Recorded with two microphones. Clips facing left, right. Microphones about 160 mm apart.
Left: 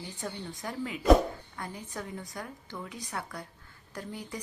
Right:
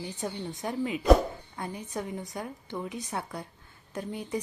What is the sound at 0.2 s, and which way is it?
Speech, 20° right (ahead or behind).